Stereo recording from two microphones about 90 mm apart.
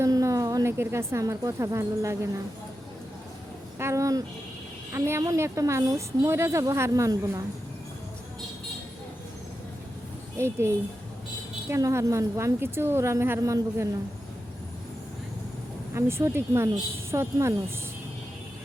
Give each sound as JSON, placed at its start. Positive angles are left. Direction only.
{"t": 0.0, "sound": "a sound", "side_deg": -40}
{"t": 0.8, "sound": "a woman's voice", "side_deg": -30}
{"t": 3.8, "sound": "a woman's voice", "side_deg": -35}
{"t": 10.3, "sound": "a woman's voice", "side_deg": -30}
{"t": 16.0, "sound": "a woman's voice", "side_deg": -30}